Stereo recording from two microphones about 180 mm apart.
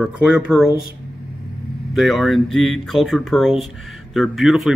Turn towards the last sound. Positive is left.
turn(degrees=0)  # may be behind; listen again after turning